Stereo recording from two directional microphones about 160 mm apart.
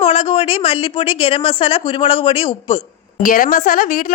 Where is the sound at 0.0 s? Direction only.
35° left (ahead or behind).